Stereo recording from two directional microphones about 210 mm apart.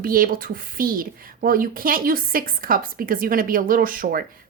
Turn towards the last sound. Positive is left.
turn(degrees=-40)  # may be behind; listen again after turning